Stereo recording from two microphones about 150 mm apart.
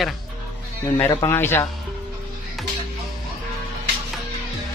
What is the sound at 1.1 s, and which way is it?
Speech, 15° left (ahead or behind).